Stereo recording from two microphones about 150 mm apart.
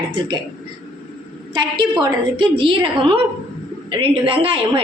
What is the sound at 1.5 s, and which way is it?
A woman's voice, 30° right (ahead or behind).